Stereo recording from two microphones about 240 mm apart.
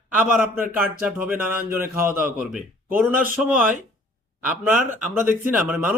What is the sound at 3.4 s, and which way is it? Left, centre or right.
Speech, centre.